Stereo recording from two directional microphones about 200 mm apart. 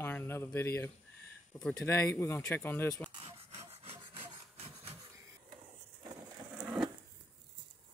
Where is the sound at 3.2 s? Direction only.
30° right (ahead or behind).